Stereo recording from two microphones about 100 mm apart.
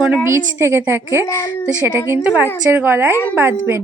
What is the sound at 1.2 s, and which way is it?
Speech, 30° left (ahead or behind).